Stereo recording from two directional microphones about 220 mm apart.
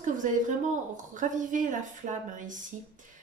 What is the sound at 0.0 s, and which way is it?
Speech, 35° right (ahead or behind).